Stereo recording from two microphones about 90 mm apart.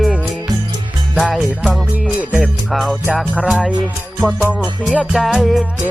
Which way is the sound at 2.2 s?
15° right (ahead or behind).